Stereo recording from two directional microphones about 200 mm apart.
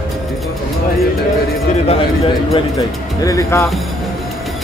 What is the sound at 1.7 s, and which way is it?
Speech, 30° left (ahead or behind).